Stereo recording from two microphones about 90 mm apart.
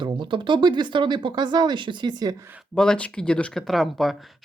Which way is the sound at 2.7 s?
10° left (ahead or behind).